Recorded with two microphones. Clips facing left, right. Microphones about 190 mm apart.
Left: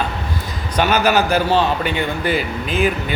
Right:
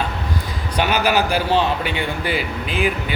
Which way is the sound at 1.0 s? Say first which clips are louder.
Left 2 dB; 45° left (ahead or behind).